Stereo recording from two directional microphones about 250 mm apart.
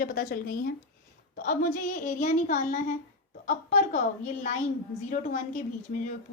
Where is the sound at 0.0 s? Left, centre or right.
Left.